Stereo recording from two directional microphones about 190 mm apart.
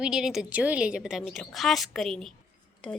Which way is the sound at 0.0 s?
5° right (ahead or behind).